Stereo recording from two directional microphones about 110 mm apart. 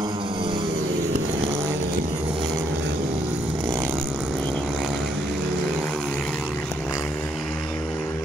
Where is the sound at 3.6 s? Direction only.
40° right (ahead or behind).